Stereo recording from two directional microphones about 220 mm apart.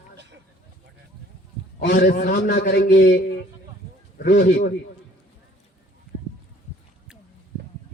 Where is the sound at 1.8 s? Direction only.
50° left (ahead or behind).